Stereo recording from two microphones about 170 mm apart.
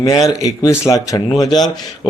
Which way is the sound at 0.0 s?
20° left (ahead or behind).